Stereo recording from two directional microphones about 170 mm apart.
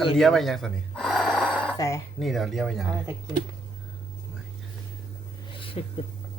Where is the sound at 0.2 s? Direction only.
Centre (ahead or behind).